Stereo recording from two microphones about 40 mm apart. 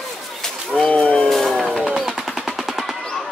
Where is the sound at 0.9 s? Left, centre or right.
Left.